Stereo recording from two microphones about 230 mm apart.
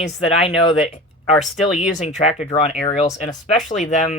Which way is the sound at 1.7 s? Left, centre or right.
Left.